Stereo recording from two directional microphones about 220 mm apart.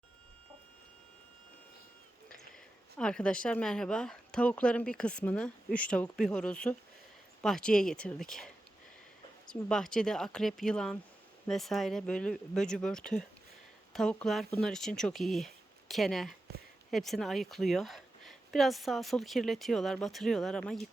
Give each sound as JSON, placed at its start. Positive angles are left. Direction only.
{"t": 3.0, "sound": "speech", "side_deg": 5}